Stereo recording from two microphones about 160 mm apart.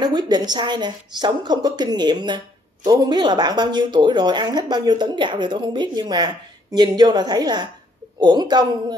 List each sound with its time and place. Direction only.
0.0 s speech: 25° right (ahead or behind)